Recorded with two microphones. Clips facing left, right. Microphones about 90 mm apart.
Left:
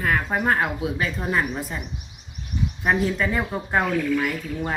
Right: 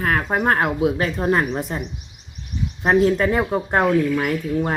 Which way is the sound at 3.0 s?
45° right (ahead or behind).